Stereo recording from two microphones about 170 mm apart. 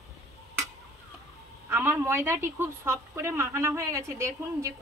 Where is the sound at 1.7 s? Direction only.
15° right (ahead or behind).